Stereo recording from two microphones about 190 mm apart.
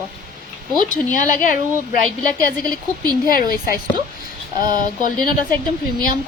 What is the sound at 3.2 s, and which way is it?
Speech, 50° left (ahead or behind).